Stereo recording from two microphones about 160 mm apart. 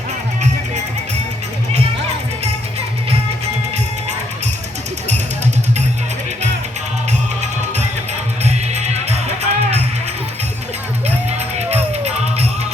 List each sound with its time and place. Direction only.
8.4 s music: 45° right (ahead or behind)
11.3 s music: 40° right (ahead or behind)